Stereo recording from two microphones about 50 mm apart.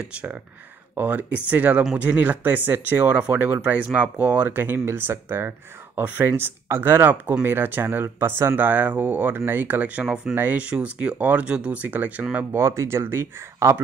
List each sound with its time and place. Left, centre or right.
0.0 s speech: right
4.5 s speech: right
8.6 s speech: right
9.8 s speech: right
10.3 s speech: right
10.6 s speech: right
11.1 s speech: right
11.4 s speech: centre
11.7 s speech: right
12.5 s speech: right